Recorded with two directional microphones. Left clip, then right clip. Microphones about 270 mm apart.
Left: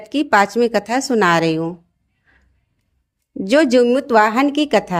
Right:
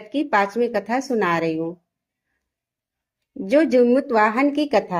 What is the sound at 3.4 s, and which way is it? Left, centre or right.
Speech, left.